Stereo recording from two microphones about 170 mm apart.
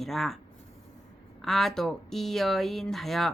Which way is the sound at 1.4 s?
Centre (ahead or behind).